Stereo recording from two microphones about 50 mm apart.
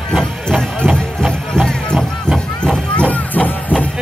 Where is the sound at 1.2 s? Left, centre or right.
Centre.